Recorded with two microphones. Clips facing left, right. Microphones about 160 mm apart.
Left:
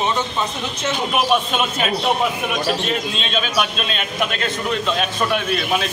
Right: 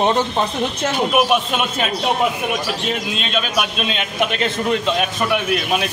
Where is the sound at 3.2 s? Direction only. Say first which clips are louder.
Even; 10° right (ahead or behind).